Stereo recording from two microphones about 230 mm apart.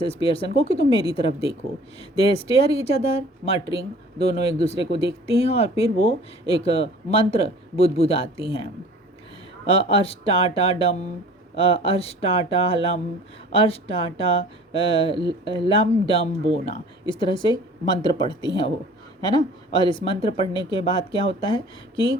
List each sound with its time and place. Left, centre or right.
0.0 s speech: left
9.6 s speech: left
15.1 s speech: centre
15.8 s speech: left